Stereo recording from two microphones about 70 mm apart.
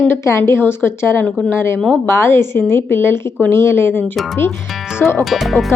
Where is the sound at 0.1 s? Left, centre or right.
Left.